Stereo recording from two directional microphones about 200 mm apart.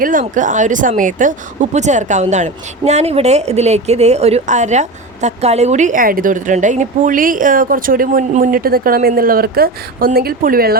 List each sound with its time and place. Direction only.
0.0 s speech: 40° right (ahead or behind)